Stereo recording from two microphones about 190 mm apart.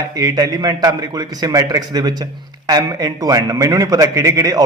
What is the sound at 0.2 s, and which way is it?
A man's voice, 20° right (ahead or behind).